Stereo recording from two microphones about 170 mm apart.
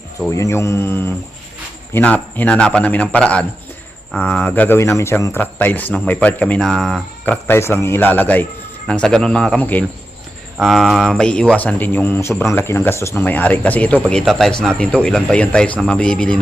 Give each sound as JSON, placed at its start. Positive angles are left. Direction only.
{"t": 0.3, "sound": "speech", "side_deg": 15}